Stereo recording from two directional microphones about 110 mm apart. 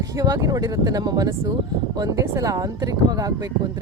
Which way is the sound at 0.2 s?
35° right (ahead or behind).